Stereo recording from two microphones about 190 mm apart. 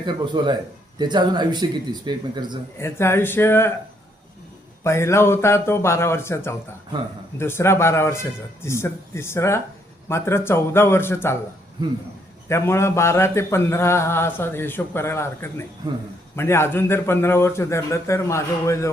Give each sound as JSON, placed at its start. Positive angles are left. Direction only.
{"t": 0.0, "sound": "speech", "side_deg": -25}
{"t": 2.7, "sound": "a man's voice", "side_deg": 15}
{"t": 4.8, "sound": "a man's voice", "side_deg": 15}
{"t": 12.5, "sound": "a man's voice", "side_deg": 15}